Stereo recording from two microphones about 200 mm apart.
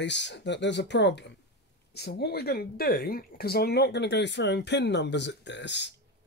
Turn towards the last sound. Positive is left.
turn(degrees=60)  # may be behind; listen again after turning